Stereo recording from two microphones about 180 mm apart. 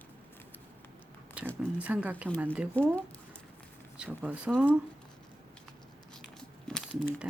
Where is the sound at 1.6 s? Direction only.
10° right (ahead or behind).